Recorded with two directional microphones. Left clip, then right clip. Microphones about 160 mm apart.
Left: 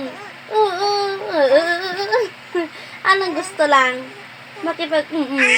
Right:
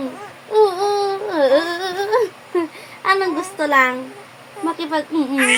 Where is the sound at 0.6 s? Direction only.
20° right (ahead or behind).